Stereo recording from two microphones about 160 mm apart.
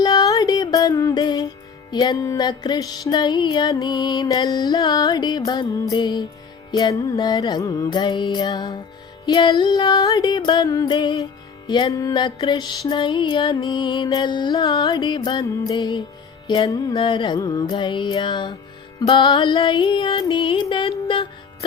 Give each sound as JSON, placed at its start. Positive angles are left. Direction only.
{"t": 0.0, "sound": "music", "side_deg": 25}